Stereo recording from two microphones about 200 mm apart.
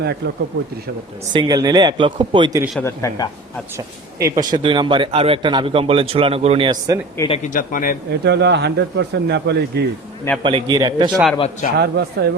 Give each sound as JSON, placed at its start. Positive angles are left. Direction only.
{"t": 1.3, "sound": "a man's voice", "side_deg": -20}
{"t": 2.7, "sound": "speech", "side_deg": 15}
{"t": 4.2, "sound": "a man's voice", "side_deg": -20}
{"t": 7.3, "sound": "speech", "side_deg": 35}
{"t": 8.2, "sound": "speech", "side_deg": -60}
{"t": 10.4, "sound": "a man's voice", "side_deg": -25}
{"t": 11.3, "sound": "speech", "side_deg": 30}
{"t": 11.8, "sound": "speech", "side_deg": -55}